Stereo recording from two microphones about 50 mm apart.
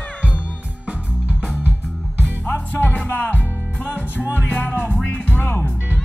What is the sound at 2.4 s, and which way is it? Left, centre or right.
Music, left.